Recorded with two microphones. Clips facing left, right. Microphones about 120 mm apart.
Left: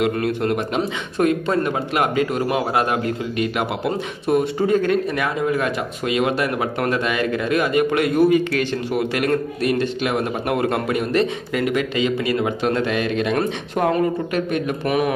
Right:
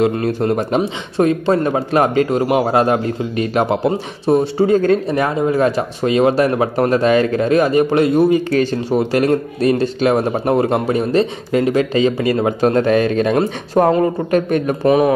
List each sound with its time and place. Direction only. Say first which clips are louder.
0.0 s a man's voice: right 4 dB; 30° right (ahead or behind)